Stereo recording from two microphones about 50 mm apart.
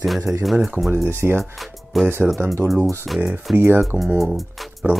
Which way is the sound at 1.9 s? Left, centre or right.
Centre.